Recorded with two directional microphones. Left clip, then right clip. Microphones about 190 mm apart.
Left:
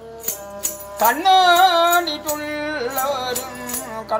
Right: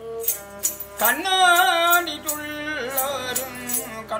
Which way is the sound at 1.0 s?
15° right (ahead or behind).